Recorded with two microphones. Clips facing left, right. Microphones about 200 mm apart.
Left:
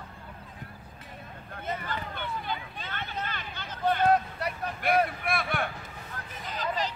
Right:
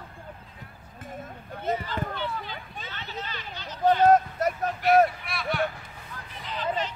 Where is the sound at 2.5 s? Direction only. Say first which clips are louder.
Left 5 dB; 55° left (ahead or behind).